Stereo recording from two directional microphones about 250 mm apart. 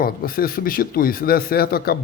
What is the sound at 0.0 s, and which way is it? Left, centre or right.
A man's voice, left.